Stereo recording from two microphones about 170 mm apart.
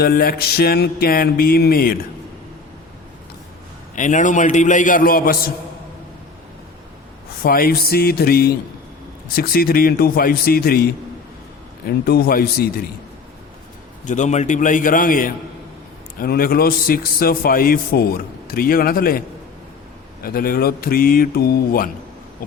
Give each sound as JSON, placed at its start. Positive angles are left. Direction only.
{"t": 0.0, "sound": "a man's voice", "side_deg": 60}
{"t": 3.9, "sound": "a man's voice", "side_deg": 50}
{"t": 7.4, "sound": "a man's voice", "side_deg": 60}
{"t": 12.0, "sound": "a man's voice", "side_deg": 60}
{"t": 14.0, "sound": "a man's voice", "side_deg": 45}
{"t": 20.2, "sound": "a man's voice", "side_deg": 60}